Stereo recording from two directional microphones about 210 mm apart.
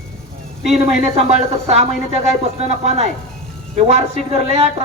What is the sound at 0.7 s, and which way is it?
A man's voice, 30° right (ahead or behind).